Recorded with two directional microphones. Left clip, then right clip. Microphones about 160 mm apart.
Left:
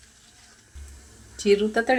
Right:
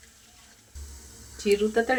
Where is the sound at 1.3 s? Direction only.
55° left (ahead or behind).